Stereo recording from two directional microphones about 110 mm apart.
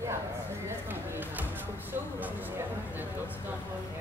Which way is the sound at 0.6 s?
20° right (ahead or behind).